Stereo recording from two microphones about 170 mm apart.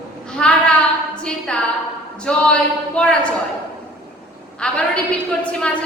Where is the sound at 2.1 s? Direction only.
5° left (ahead or behind).